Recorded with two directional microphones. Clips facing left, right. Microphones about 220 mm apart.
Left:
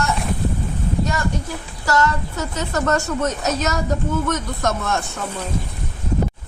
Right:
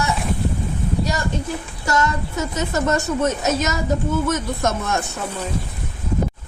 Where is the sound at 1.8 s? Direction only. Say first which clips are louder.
Left 2 dB; 20° right (ahead or behind).